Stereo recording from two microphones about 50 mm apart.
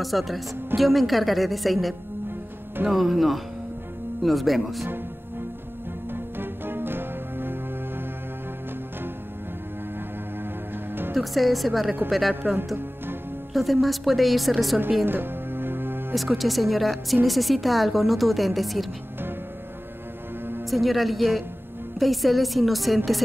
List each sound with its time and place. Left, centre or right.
0.0 s a woman's voice: centre
6.1 s music: right
11.1 s a woman's voice: centre
13.5 s a woman's voice: centre
15.0 s music: right
16.2 s a woman's voice: centre
20.7 s a woman's voice: centre